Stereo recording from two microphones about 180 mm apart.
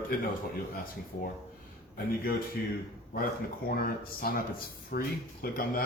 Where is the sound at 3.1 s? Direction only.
55° left (ahead or behind).